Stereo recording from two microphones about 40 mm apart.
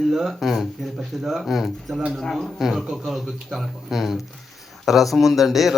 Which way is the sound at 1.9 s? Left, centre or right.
Centre.